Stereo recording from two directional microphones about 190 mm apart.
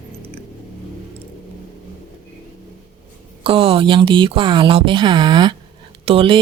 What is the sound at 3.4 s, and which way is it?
A woman's voice, 30° right (ahead or behind).